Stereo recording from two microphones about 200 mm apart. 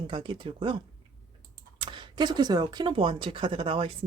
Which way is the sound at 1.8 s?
25° right (ahead or behind).